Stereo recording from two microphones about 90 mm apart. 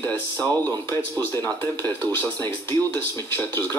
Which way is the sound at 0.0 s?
30° left (ahead or behind).